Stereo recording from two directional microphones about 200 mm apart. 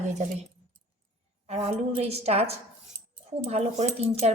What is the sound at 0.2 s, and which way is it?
Speech, 35° right (ahead or behind).